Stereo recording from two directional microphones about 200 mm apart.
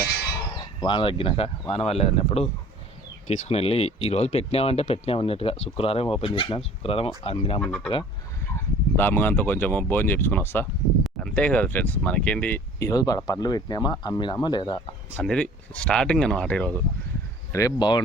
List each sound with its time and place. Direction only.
0.8 s speech: 25° left (ahead or behind)
8.5 s speech: 10° left (ahead or behind)
15.1 s speech: 5° left (ahead or behind)
17.5 s speech: 15° left (ahead or behind)